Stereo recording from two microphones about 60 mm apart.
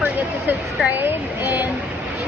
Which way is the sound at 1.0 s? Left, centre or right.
Right.